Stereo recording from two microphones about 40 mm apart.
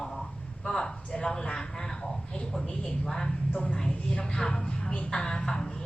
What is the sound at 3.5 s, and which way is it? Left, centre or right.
Speech, left.